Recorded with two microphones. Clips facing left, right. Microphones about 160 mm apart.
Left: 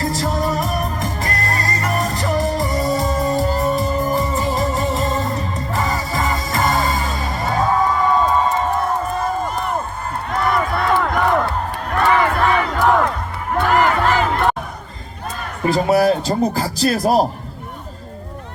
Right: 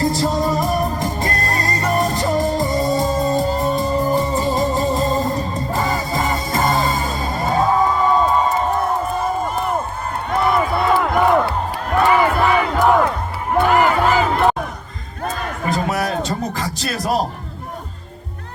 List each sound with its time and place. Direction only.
0.0 s music: 25° right (ahead or behind)
9.4 s crowd: 5° right (ahead or behind)
10.2 s a sound: centre (ahead or behind)
10.7 s music: 5° right (ahead or behind)
12.0 s crowd: 10° right (ahead or behind)
12.7 s battle cry: 10° right (ahead or behind)
13.5 s music: 5° right (ahead or behind)
15.7 s speech: 30° left (ahead or behind)